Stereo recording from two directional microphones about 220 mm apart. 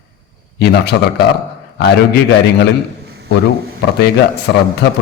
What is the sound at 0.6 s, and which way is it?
Speech, 50° left (ahead or behind).